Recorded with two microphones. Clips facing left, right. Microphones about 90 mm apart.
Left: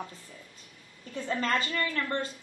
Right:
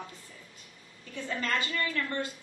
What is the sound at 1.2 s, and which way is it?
A woman's voice, 35° left (ahead or behind).